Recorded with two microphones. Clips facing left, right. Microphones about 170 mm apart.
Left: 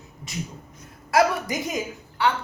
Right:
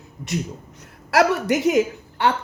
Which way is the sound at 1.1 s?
70° right (ahead or behind).